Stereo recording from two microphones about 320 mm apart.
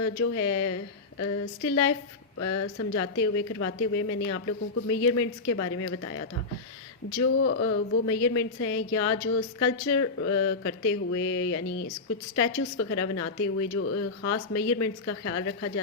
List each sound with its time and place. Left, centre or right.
0.0 s speech: left